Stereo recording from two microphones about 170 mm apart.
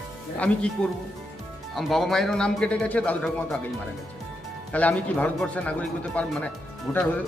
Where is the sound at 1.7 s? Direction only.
Centre (ahead or behind).